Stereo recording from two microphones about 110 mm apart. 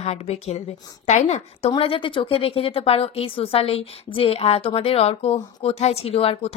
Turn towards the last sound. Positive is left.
turn(degrees=65)  # may be behind; listen again after turning